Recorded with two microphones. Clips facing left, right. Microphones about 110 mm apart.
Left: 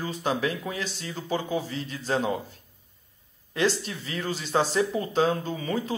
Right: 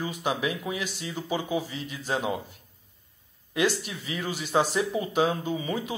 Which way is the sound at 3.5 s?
15° right (ahead or behind).